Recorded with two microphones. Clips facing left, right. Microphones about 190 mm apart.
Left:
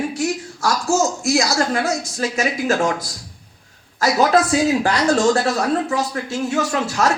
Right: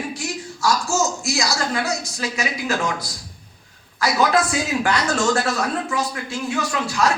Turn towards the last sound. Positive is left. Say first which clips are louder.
# left 4 dB
turn(degrees=45)  # may be behind; listen again after turning